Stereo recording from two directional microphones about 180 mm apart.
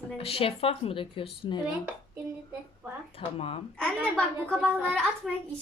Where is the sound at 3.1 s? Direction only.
30° left (ahead or behind).